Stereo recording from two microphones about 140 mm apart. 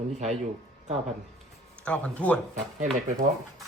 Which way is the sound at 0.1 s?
55° right (ahead or behind).